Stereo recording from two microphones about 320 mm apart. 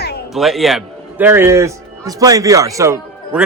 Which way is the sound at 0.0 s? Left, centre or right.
Left.